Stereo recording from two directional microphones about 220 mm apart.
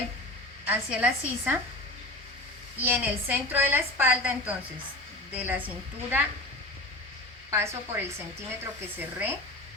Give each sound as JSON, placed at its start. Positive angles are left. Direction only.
{"t": 0.6, "sound": "a woman's voice", "side_deg": -5}
{"t": 2.8, "sound": "a woman's voice", "side_deg": -10}
{"t": 7.5, "sound": "a woman's voice", "side_deg": -10}